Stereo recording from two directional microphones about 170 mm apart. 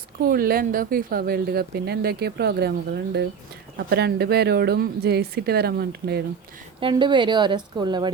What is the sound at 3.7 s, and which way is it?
Speech, 75° right (ahead or behind).